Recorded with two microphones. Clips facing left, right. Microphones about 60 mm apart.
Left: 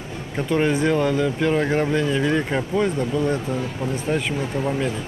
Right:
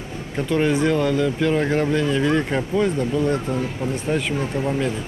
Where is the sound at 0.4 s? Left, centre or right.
Centre.